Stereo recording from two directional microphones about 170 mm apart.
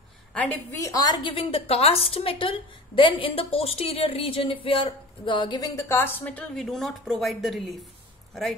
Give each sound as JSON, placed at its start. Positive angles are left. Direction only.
{"t": 0.3, "sound": "a woman's voice", "side_deg": 10}